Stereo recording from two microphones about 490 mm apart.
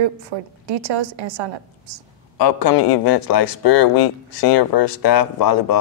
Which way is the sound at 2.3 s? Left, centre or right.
Left.